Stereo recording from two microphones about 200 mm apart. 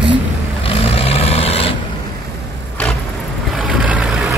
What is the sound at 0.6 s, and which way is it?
Vehicle, 30° left (ahead or behind).